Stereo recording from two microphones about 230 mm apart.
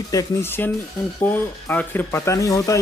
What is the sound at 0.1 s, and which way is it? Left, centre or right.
Speech, centre.